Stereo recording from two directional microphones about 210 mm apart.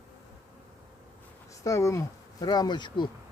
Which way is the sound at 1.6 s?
15° left (ahead or behind).